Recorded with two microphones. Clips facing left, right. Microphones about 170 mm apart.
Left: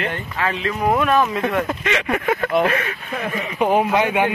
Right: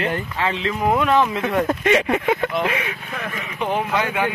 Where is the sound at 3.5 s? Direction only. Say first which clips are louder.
Left 6 dB; 45° left (ahead or behind).